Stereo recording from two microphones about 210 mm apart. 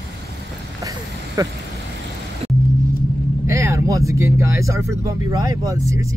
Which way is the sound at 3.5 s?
15° right (ahead or behind).